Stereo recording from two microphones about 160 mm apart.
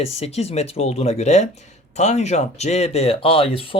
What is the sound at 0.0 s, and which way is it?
Speech, 40° left (ahead or behind).